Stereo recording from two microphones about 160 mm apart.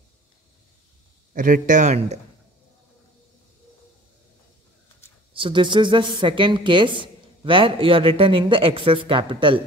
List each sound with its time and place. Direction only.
1.3 s a man's voice: 60° right (ahead or behind)
5.3 s a woman's voice: 30° right (ahead or behind)